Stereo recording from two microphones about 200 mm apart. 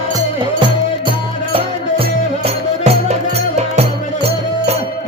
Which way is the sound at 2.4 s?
30° right (ahead or behind).